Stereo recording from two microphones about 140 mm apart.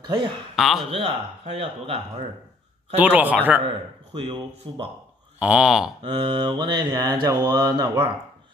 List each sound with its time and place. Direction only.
0.0 s speech: 35° right (ahead or behind)
0.6 s a man's voice: centre (ahead or behind)
0.9 s speech: 45° right (ahead or behind)
3.0 s speech: 10° right (ahead or behind)
4.1 s mantra: 40° right (ahead or behind)
5.4 s speech: 5° right (ahead or behind)
6.0 s mantra: 35° right (ahead or behind)